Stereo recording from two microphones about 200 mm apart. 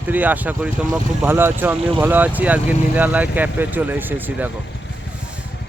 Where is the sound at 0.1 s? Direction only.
10° right (ahead or behind).